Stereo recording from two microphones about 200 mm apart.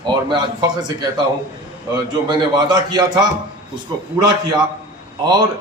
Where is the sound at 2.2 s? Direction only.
20° right (ahead or behind).